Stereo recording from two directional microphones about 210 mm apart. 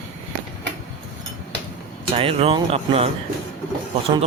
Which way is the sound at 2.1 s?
25° right (ahead or behind).